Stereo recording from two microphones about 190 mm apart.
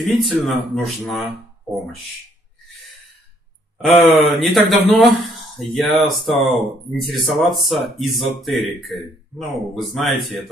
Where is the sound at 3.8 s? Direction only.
Centre (ahead or behind).